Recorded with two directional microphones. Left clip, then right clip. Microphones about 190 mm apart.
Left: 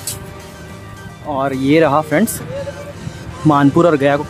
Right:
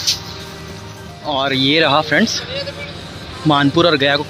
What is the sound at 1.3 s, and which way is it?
Speech, 10° left (ahead or behind).